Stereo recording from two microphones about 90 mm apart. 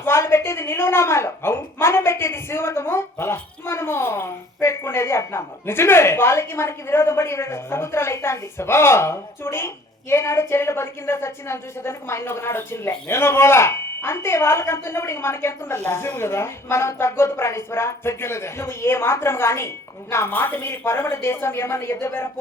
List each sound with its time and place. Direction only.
0.0 s a woman's voice: 25° left (ahead or behind)